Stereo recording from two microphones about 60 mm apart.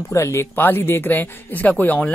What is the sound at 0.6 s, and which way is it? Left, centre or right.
Speech, left.